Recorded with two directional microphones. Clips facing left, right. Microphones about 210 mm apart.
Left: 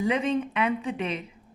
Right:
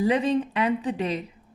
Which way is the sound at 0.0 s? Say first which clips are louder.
Right 3 dB; 35° right (ahead or behind).